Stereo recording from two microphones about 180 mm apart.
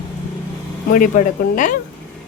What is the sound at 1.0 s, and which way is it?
Speech, 45° left (ahead or behind).